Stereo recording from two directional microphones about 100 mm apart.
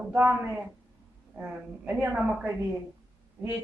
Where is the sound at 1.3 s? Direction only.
15° right (ahead or behind).